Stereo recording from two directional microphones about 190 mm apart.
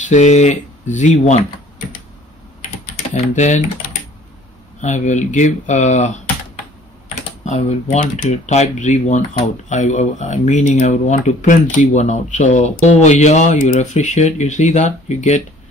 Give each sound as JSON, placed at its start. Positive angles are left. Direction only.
{"t": 0.1, "sound": "speech", "side_deg": 35}
{"t": 3.2, "sound": "speech", "side_deg": 40}
{"t": 4.8, "sound": "speech", "side_deg": 40}
{"t": 7.4, "sound": "speech", "side_deg": 35}